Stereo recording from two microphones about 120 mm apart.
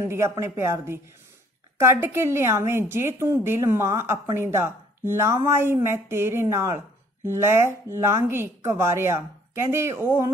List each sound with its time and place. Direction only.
0.0 s a woman's voice: 20° right (ahead or behind)